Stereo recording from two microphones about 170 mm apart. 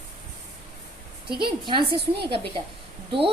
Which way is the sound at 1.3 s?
30° right (ahead or behind).